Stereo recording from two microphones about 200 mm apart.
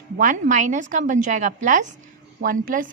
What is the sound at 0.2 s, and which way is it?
A woman's voice, 40° right (ahead or behind).